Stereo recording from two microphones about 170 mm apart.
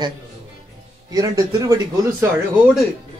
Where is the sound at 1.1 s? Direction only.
20° right (ahead or behind).